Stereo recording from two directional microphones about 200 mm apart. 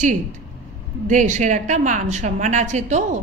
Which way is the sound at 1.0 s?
40° right (ahead or behind).